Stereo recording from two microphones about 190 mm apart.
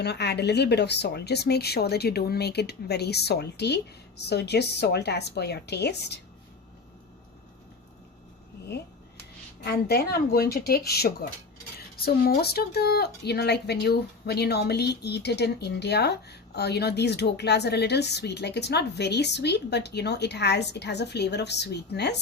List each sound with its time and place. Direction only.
0.0 s speech: 60° left (ahead or behind)
9.6 s speech: 55° left (ahead or behind)